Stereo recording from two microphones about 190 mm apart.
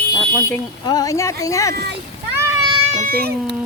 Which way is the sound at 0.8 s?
20° left (ahead or behind).